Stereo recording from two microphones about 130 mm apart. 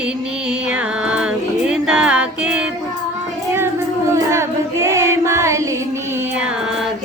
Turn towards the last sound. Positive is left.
turn(degrees=-20)  # may be behind; listen again after turning